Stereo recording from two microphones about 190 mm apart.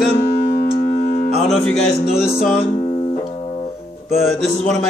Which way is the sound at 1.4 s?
5° left (ahead or behind).